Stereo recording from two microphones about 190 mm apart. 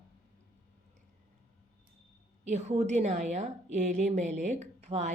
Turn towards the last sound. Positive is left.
turn(degrees=-35)  # may be behind; listen again after turning